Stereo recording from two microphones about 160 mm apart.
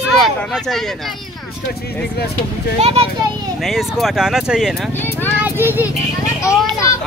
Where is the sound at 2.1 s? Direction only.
80° left.